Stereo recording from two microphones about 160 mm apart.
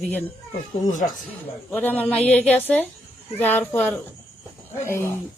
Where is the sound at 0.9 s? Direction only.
55° left (ahead or behind).